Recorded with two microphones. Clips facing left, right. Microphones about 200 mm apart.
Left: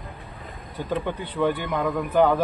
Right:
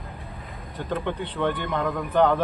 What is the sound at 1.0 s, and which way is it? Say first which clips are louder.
A man's voice: left 2 dB; 10° left (ahead or behind).